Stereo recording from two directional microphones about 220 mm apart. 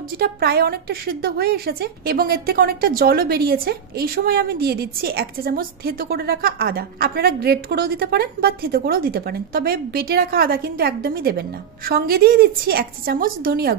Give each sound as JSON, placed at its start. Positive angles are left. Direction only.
{"t": 0.2, "sound": "a woman's voice", "side_deg": -45}